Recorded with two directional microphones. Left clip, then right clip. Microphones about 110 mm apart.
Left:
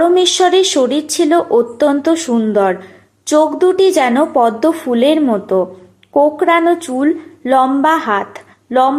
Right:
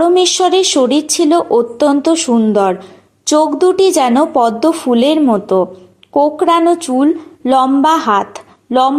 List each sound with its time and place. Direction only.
0.0 s a woman's voice: 30° right (ahead or behind)